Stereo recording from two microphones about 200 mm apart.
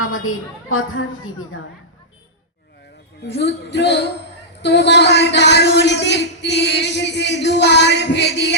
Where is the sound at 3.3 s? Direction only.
60° left (ahead or behind).